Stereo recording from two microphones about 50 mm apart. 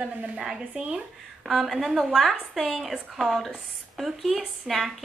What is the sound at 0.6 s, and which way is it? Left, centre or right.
Speech, right.